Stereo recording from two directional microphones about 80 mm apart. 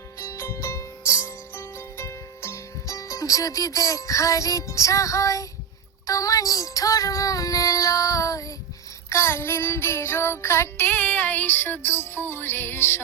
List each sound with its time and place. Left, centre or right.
0.3 s music: left
9.0 s child singing: left